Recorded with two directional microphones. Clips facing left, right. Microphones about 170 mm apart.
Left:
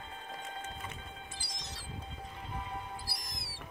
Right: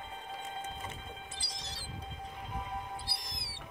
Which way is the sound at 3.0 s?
30° right (ahead or behind).